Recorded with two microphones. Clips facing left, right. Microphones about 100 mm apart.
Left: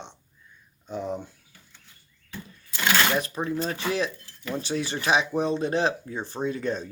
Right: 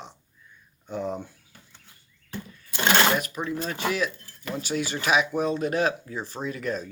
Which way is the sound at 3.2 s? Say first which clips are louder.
Left 2 dB; 35° left (ahead or behind).